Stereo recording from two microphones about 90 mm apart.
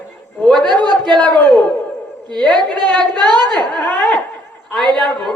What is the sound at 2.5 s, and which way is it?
A woman's voice, 55° right (ahead or behind).